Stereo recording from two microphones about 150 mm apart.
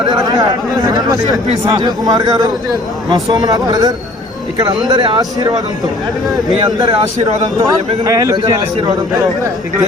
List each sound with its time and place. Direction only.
0.1 s a man's voice: 25° right (ahead or behind)
7.7 s a man's voice: 25° right (ahead or behind)